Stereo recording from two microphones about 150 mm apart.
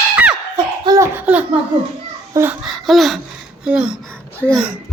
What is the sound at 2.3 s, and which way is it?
Speech, 15° right (ahead or behind).